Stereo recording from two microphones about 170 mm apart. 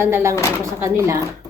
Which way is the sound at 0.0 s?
15° right (ahead or behind).